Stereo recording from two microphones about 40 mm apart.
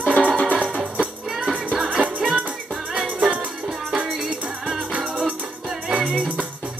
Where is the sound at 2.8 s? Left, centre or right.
Centre.